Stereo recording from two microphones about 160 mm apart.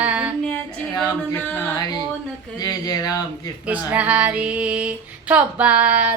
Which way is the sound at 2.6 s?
25° left (ahead or behind).